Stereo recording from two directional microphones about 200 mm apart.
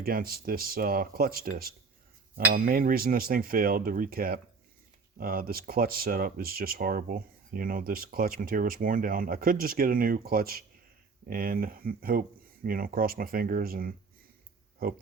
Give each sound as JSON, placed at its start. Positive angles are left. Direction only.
{"t": 0.0, "sound": "speech", "side_deg": -45}